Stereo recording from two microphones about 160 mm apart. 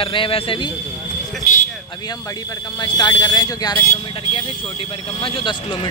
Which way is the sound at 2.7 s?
30° left (ahead or behind).